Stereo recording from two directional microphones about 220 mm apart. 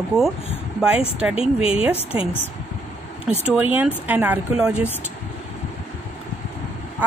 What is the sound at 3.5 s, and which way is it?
Speech, 5° right (ahead or behind).